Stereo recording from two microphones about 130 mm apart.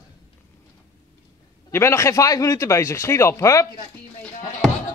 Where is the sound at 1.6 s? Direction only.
20° left (ahead or behind).